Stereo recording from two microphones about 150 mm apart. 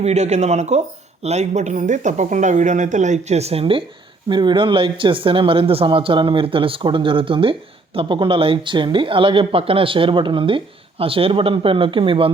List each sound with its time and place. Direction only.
0.0 s speech: 50° right (ahead or behind)